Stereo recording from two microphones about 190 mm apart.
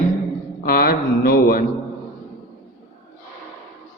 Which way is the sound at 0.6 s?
55° left (ahead or behind).